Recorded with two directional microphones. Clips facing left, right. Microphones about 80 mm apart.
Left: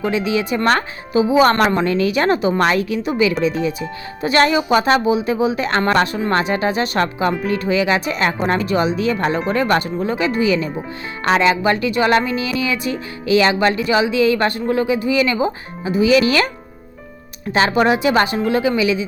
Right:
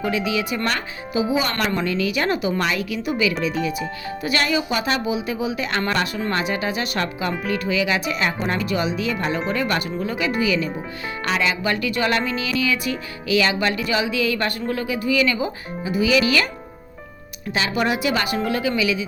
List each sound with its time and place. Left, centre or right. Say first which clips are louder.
0.0 s speech: left 4 dB; left
12.5 s music: left 2 dB; left
17.5 s music: left 7 dB; left